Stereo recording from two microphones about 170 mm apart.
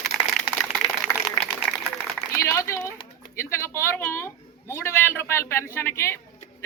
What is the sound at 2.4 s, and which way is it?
A man's voice, 20° left (ahead or behind).